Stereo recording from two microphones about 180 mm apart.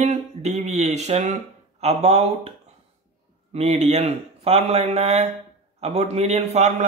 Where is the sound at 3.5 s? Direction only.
35° right (ahead or behind).